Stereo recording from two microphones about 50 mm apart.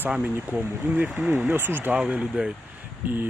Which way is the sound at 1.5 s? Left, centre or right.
Right.